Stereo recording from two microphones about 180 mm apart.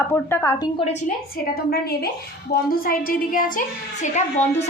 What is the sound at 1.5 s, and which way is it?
A woman's voice, 60° left (ahead or behind).